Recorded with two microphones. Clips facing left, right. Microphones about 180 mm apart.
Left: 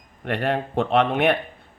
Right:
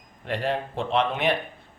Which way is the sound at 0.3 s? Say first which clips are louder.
Left 3 dB; 60° left (ahead or behind).